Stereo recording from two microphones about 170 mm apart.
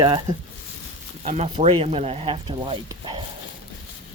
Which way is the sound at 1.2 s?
40° right (ahead or behind).